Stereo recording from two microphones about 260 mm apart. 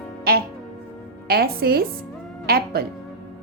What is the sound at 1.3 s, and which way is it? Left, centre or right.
A woman's voice, right.